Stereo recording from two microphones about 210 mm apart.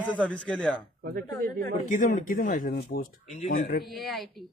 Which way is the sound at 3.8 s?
Centre (ahead or behind).